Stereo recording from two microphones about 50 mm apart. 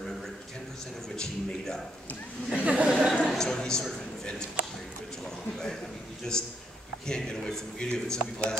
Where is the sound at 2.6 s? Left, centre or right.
Right.